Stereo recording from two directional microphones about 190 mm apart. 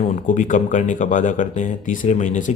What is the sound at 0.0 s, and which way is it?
Speech, 40° left (ahead or behind).